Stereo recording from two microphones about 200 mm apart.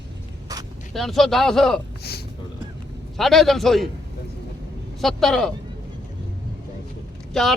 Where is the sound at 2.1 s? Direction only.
50° left (ahead or behind).